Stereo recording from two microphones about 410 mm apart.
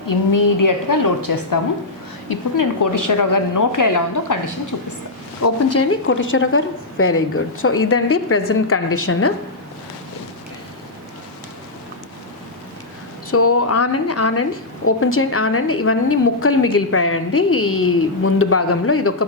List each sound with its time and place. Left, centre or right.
0.3 s a woman's voice: left
5.4 s a woman's voice: left
13.3 s a woman's voice: left